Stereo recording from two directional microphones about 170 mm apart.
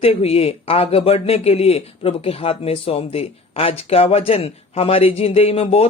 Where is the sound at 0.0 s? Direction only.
35° left (ahead or behind).